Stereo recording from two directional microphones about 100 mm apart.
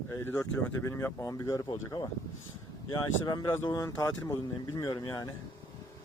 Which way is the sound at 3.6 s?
40° left (ahead or behind).